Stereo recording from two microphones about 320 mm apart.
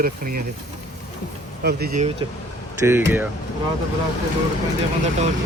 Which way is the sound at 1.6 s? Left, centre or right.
Right.